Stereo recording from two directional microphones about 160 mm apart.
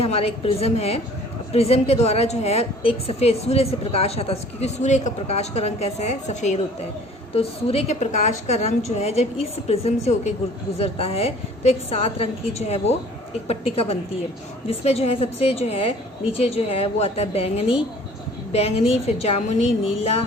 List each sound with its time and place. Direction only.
0.0 s a woman's voice: 40° left (ahead or behind)